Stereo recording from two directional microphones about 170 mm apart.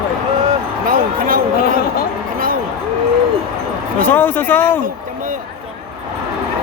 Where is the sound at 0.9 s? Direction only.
55° right (ahead or behind).